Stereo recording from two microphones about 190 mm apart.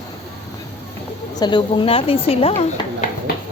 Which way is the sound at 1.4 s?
25° left (ahead or behind).